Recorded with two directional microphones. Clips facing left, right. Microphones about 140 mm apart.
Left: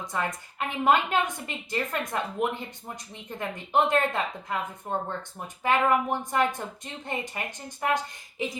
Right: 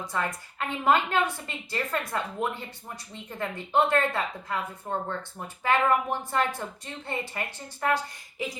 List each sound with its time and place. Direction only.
0.0 s a woman's voice: 20° left (ahead or behind)